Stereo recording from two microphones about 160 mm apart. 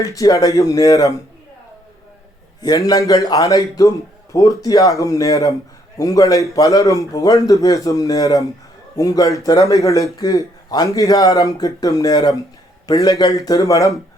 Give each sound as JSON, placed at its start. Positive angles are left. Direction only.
{"t": 0.0, "sound": "a man's voice", "side_deg": 20}
{"t": 2.6, "sound": "a man's voice", "side_deg": 25}